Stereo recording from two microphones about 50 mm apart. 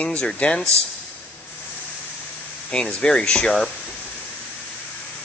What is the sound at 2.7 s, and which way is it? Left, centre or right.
Speech, centre.